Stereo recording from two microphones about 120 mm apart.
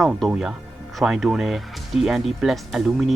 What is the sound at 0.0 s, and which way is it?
Speech, centre (ahead or behind).